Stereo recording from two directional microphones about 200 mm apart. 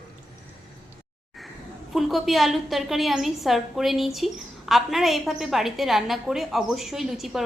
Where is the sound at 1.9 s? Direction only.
Centre (ahead or behind).